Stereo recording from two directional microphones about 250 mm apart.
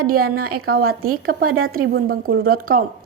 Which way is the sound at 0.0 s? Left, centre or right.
Right.